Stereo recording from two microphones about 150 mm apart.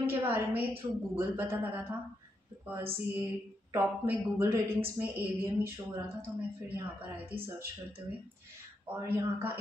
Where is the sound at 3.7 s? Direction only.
15° right (ahead or behind).